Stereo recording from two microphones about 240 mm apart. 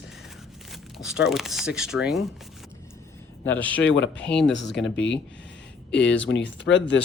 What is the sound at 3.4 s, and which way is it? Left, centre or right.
Speech, centre.